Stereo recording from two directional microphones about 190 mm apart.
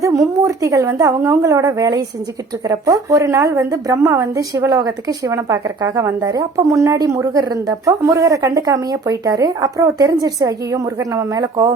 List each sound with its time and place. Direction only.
0.0 s a woman's voice: 15° right (ahead or behind)